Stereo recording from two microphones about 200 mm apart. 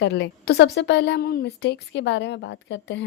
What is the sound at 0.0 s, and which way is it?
A woman's voice, 55° left (ahead or behind).